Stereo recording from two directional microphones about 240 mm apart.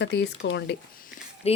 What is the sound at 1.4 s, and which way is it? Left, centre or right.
Speech, left.